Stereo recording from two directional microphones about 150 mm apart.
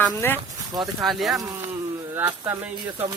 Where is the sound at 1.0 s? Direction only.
Centre (ahead or behind).